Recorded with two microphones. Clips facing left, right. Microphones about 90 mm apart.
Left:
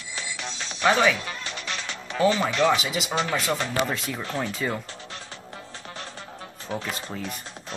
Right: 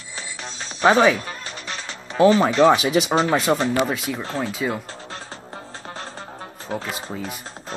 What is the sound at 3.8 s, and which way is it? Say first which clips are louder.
Speech: right 4 dB; 5° right (ahead or behind).